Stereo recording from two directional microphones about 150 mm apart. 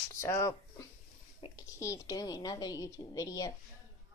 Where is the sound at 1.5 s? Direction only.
20° left (ahead or behind).